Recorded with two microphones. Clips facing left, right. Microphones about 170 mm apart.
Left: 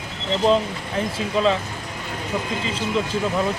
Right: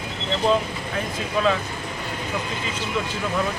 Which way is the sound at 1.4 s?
30° left (ahead or behind).